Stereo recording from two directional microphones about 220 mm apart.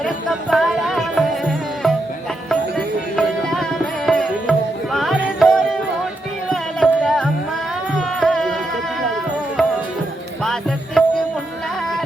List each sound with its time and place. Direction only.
0.0 s music: centre (ahead or behind)
10.4 s music: centre (ahead or behind)